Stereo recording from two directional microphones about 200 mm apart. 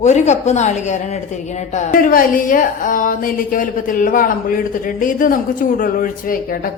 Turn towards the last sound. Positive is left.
turn(degrees=45)  # may be behind; listen again after turning